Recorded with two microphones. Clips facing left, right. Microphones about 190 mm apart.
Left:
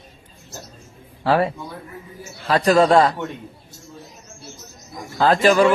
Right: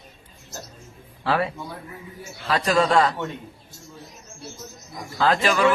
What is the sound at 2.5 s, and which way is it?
Speech, 40° left (ahead or behind).